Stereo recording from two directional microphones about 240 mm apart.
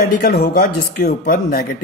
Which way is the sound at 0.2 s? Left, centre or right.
Left.